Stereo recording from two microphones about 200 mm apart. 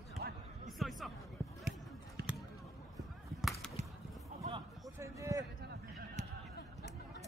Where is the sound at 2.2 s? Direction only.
55° right (ahead or behind).